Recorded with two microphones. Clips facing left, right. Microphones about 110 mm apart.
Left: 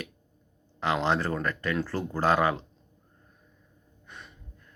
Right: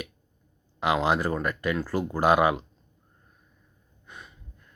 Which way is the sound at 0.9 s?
10° right (ahead or behind).